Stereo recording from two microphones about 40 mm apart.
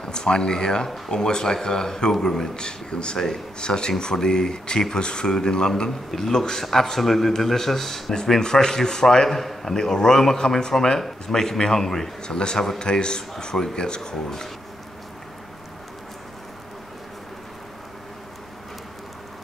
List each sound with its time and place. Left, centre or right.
0.0 s a man's voice: left
8.2 s a man's voice: centre